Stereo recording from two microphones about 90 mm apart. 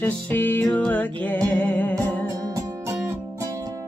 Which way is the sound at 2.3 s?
40° right (ahead or behind).